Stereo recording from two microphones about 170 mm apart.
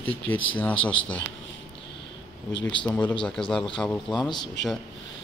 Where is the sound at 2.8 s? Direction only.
10° left (ahead or behind).